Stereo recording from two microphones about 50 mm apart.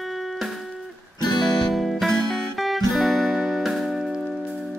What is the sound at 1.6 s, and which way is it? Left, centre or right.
Music, centre.